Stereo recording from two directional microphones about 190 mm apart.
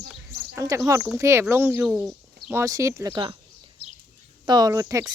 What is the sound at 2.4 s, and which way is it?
Speech, 15° right (ahead or behind).